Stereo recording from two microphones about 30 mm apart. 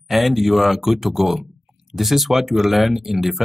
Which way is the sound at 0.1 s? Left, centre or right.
Centre.